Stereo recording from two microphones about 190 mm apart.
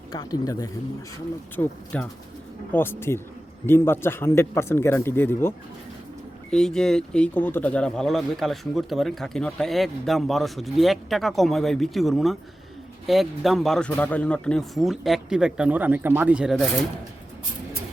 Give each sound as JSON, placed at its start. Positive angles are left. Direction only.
{"t": 0.1, "sound": "speech", "side_deg": 20}
{"t": 1.5, "sound": "speech", "side_deg": 5}